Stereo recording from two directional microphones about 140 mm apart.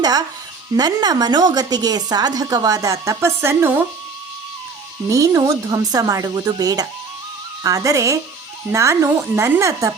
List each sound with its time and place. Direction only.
0.0 s a woman's voice: 30° right (ahead or behind)
5.0 s a woman's voice: 25° right (ahead or behind)